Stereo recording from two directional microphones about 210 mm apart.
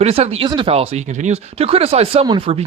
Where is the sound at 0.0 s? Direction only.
30° right (ahead or behind).